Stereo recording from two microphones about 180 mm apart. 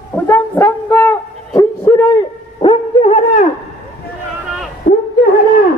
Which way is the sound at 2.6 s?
30° left (ahead or behind).